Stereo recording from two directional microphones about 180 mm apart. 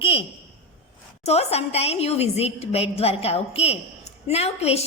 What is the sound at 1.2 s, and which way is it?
A woman's voice, 35° left (ahead or behind).